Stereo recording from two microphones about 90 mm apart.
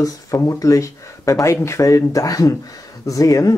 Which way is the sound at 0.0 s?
40° left (ahead or behind).